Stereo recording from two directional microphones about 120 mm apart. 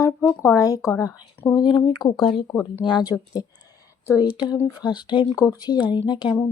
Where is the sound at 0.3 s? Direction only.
25° left (ahead or behind).